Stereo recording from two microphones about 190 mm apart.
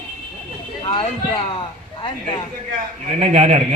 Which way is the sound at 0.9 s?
30° left (ahead or behind).